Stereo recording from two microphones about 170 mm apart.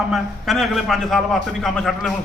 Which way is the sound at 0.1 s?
Centre (ahead or behind).